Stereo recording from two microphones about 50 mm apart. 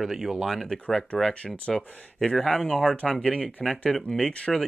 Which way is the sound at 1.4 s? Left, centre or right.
Left.